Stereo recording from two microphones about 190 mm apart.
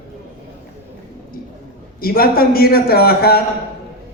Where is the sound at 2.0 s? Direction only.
50° left (ahead or behind).